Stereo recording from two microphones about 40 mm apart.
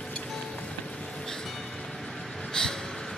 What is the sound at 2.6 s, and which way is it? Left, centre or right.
Gasp, left.